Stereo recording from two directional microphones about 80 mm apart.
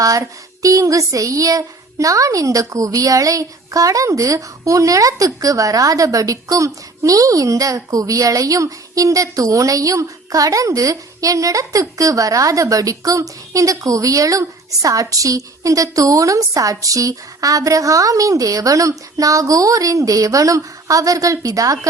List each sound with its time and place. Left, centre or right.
0.0 s child singing: right